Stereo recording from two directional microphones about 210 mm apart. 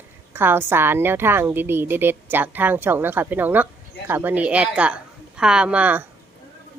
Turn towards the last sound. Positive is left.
turn(degrees=-5)  # may be behind; listen again after turning